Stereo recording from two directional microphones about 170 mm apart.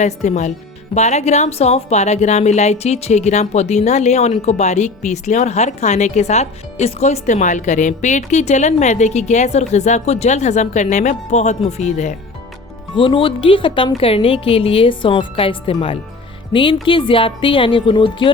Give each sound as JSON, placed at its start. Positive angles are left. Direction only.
{"t": 0.0, "sound": "speech", "side_deg": 45}
{"t": 13.0, "sound": "speech", "side_deg": 30}